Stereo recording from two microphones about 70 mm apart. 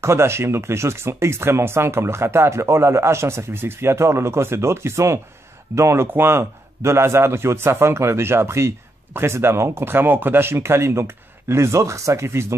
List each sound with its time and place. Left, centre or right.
0.0 s a man's voice: right